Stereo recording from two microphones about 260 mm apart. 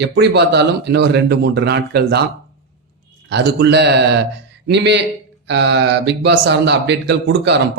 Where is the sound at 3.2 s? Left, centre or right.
Right.